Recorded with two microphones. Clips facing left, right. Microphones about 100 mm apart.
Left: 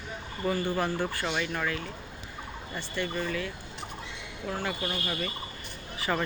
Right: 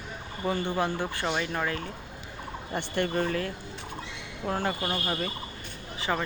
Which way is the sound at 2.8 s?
50° right (ahead or behind).